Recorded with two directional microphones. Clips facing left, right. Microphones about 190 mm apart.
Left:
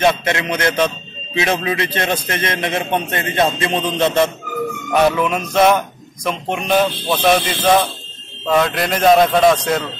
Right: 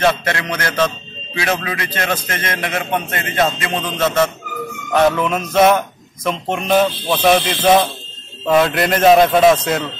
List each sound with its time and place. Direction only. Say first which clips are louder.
0.0 s a man's voice: left 1 dB; 20° left (ahead or behind)
5.1 s a man's voice: even; centre (ahead or behind)